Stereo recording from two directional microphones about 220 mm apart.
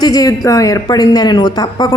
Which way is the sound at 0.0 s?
15° left (ahead or behind).